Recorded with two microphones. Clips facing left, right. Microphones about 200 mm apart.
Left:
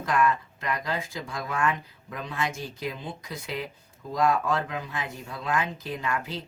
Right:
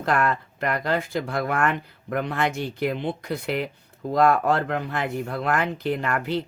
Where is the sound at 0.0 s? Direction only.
65° right (ahead or behind).